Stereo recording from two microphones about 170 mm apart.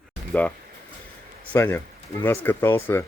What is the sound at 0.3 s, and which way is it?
Speech, 10° left (ahead or behind).